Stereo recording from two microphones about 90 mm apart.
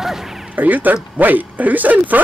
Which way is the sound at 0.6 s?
20° right (ahead or behind).